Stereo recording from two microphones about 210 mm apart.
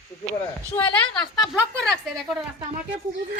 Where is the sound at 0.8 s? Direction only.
5° left (ahead or behind).